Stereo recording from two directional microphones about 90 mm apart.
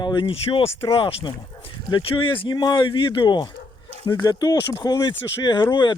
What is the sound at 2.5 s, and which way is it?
Speech, 55° left (ahead or behind).